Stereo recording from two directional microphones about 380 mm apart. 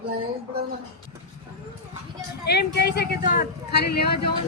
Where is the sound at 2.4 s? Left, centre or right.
Left.